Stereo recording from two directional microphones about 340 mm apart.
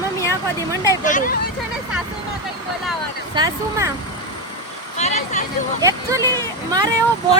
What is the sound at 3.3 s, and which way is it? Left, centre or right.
Speech, centre.